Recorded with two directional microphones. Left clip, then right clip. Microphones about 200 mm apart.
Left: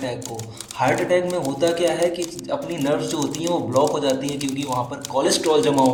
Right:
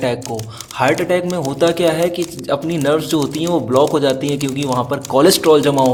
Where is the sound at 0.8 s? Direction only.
55° right (ahead or behind).